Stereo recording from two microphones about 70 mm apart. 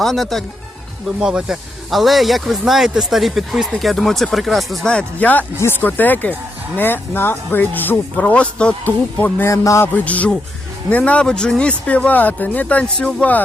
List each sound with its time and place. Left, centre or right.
0.0 s speech: centre
1.2 s speech: centre
4.9 s speech: centre
5.8 s speech: left
9.5 s speech: left
9.8 s speech: left